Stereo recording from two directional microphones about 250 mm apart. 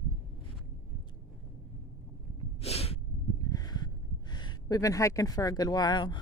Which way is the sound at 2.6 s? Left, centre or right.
Left.